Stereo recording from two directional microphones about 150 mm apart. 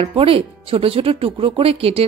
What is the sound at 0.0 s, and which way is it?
Speech, 40° right (ahead or behind).